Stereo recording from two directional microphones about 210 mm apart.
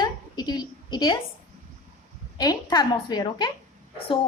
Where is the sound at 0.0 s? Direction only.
20° left (ahead or behind).